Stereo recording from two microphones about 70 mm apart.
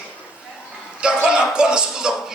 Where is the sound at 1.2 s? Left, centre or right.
Centre.